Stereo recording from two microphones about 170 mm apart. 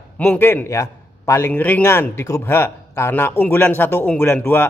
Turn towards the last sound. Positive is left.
turn(degrees=10)  # may be behind; listen again after turning